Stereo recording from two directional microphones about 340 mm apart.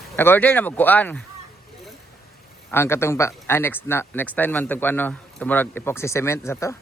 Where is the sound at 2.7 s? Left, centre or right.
Centre.